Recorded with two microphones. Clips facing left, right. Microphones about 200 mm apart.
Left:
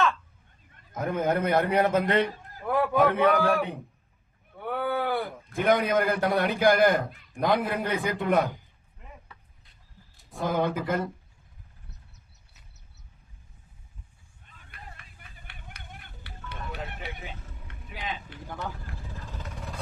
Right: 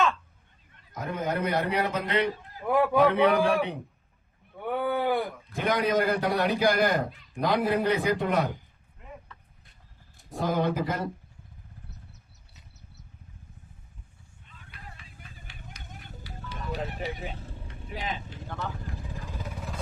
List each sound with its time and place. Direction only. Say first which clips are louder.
0.9 s a man's voice: left 4 dB; 50° left (ahead or behind)
2.6 s a man's voice: right 2 dB; 15° right (ahead or behind)
3.1 s a man's voice: right 1 dB; 50° left (ahead or behind)
3.4 s a man's voice: even; centre (ahead or behind)
4.6 s a sound: right 1 dB; 15° right (ahead or behind)
5.5 s a man's voice: left 3 dB; 55° left (ahead or behind)
9.0 s vehicle: right 4 dB; centre (ahead or behind)
10.4 s a man's voice: even; 55° left (ahead or behind)
14.4 s vehicle: even; 50° left (ahead or behind)
16.6 s music: right 4 dB; 35° right (ahead or behind)
17.2 s vehicle: right 4 dB; 35° right (ahead or behind)
18.4 s speech: even; 15° left (ahead or behind)
18.9 s vehicle: right 3 dB; 15° right (ahead or behind)